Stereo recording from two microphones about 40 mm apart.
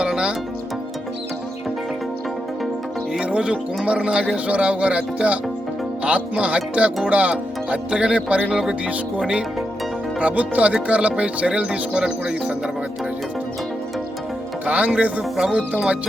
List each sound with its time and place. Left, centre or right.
0.0 s music: right
3.2 s speech: right
10.2 s speech: right
14.7 s speech: right